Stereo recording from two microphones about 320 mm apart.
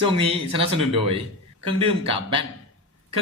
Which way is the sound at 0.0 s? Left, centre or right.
Centre.